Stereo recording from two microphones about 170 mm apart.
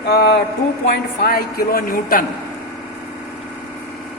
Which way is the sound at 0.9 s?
65° left (ahead or behind).